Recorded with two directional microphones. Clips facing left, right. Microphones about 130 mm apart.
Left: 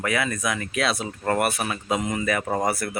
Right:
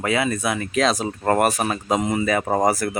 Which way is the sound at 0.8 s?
40° right (ahead or behind).